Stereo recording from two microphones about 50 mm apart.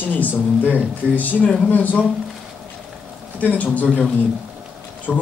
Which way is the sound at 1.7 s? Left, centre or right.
Left.